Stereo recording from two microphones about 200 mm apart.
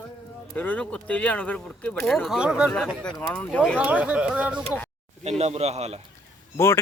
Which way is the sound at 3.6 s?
5° right (ahead or behind).